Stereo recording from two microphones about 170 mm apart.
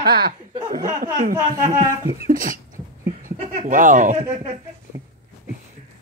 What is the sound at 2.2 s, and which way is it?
Speech, 55° right (ahead or behind).